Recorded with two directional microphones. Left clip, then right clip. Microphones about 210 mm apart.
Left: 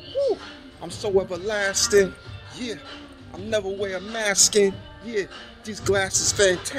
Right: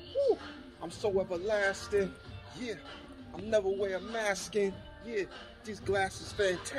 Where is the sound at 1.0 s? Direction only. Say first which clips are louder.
Left 8 dB; 20° left (ahead or behind).